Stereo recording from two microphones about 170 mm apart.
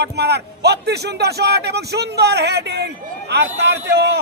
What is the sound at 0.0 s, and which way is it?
A man's voice, 75° right (ahead or behind).